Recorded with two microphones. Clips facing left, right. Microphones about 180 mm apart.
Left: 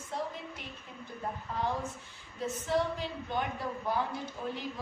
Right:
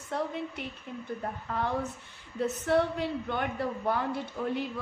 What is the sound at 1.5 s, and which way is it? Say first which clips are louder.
A woman's voice: right 3 dB; 65° right (ahead or behind).